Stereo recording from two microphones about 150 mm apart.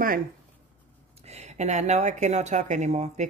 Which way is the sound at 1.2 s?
45° right (ahead or behind).